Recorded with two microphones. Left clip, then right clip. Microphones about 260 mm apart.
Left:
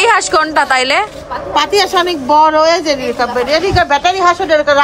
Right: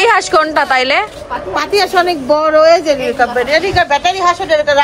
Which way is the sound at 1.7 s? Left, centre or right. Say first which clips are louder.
Right 4 dB; centre.